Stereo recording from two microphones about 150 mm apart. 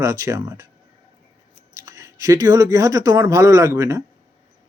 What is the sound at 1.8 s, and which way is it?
Speech, 20° right (ahead or behind).